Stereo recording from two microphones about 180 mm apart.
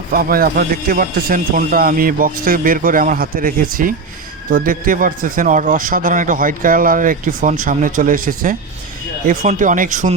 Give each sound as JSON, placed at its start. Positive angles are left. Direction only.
{"t": 0.1, "sound": "a man's voice", "side_deg": -55}